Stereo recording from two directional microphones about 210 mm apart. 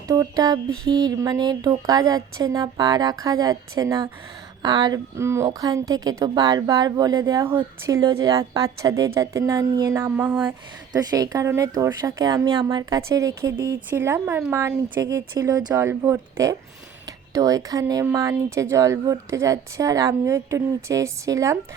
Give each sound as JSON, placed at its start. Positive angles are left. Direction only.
{"t": 0.1, "sound": "music", "side_deg": -20}
{"t": 0.9, "sound": "a woman's voice", "side_deg": -20}